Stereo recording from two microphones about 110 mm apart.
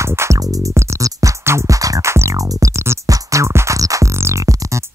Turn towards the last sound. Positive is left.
turn(degrees=-30)  # may be behind; listen again after turning